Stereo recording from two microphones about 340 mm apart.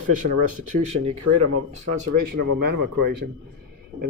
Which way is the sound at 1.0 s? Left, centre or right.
Right.